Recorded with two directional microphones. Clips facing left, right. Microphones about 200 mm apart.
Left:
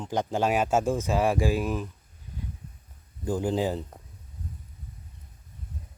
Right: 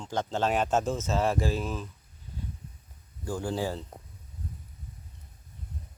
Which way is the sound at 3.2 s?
20° left (ahead or behind).